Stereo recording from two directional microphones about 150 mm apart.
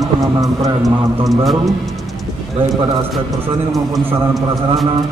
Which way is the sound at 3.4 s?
20° right (ahead or behind).